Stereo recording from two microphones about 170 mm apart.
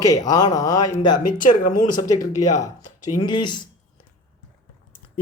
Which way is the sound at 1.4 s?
50° left (ahead or behind).